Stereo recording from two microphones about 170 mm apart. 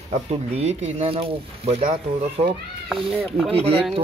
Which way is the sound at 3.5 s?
35° right (ahead or behind).